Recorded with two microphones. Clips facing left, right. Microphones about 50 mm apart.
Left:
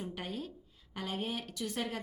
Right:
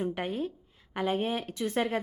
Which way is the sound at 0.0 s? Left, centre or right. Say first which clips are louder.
Right 9 dB; right.